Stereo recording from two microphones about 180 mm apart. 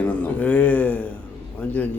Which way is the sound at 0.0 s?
10° left (ahead or behind).